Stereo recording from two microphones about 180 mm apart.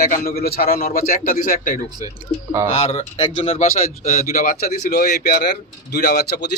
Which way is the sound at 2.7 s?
35° left (ahead or behind).